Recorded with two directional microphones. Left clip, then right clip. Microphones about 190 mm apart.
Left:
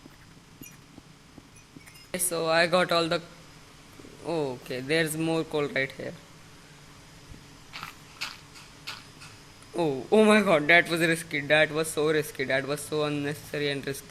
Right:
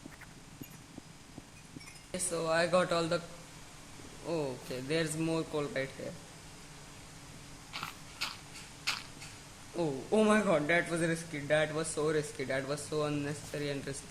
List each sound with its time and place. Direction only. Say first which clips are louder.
2.3 s a man's voice: left 6 dB; 20° left (ahead or behind)
4.3 s speech: left 6 dB; 15° left (ahead or behind)
7.7 s biting: left 1 dB; centre (ahead or behind)
8.8 s a sound: right 4 dB; centre (ahead or behind)
9.7 s a man's voice: left 8 dB; 25° left (ahead or behind)